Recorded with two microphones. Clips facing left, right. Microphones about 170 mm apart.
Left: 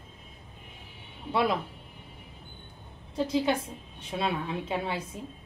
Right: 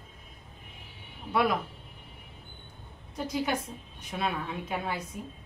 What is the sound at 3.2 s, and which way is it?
A woman's voice, 25° left (ahead or behind).